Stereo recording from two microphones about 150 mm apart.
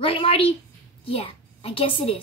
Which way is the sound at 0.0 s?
40° left (ahead or behind).